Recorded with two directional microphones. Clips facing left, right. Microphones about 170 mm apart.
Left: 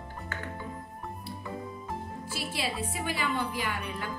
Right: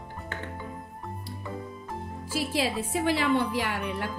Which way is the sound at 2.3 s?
90° right.